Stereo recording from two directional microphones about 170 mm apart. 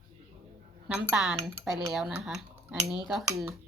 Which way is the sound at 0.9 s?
5° right (ahead or behind).